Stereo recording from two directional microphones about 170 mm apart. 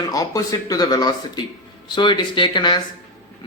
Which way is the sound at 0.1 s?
20° left (ahead or behind).